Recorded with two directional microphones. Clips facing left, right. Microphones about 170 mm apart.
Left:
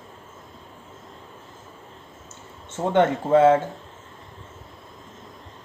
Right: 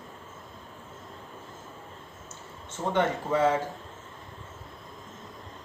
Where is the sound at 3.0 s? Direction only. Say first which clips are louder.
Left 8 dB; 55° left (ahead or behind).